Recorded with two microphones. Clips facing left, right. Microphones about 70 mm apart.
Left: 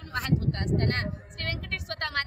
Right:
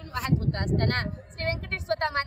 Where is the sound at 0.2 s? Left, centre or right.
Right.